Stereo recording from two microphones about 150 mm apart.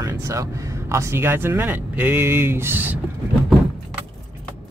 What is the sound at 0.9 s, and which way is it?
Speech, 15° right (ahead or behind).